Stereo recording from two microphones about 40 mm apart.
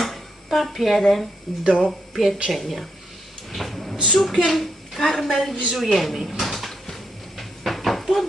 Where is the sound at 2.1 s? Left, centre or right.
Centre.